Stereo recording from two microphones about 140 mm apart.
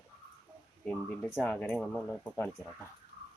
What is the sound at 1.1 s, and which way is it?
Speech, centre (ahead or behind).